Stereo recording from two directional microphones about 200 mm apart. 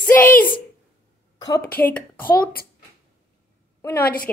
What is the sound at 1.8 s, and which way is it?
Speech, 10° left (ahead or behind).